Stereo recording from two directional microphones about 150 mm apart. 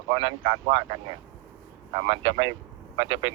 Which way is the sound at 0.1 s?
35° right (ahead or behind).